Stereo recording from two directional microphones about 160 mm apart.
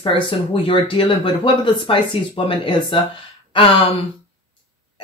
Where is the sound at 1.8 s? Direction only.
30° left (ahead or behind).